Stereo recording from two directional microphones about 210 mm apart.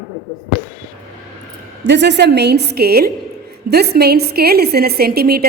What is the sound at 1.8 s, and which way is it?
A woman's voice, 55° right (ahead or behind).